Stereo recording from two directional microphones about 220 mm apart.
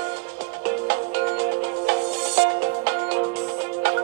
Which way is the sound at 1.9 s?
50° right (ahead or behind).